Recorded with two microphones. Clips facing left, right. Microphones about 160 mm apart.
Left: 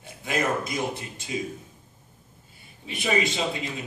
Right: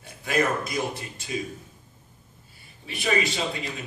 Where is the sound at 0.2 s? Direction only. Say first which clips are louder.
Right 2 dB; 20° left (ahead or behind).